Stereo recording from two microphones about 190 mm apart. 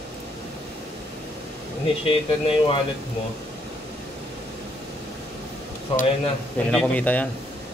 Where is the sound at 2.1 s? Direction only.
30° left (ahead or behind).